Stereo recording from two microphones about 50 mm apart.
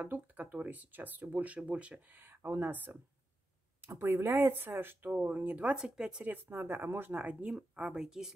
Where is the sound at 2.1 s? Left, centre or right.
Right.